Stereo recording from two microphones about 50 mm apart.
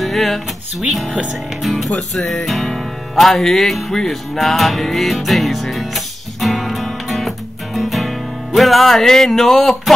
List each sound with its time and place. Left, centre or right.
0.0 s music: centre
1.6 s speech: centre
2.1 s music: centre